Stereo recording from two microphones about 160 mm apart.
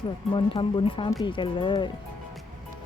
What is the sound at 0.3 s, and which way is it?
Speech, 30° left (ahead or behind).